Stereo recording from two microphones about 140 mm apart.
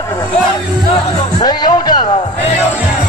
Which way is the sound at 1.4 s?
30° left (ahead or behind).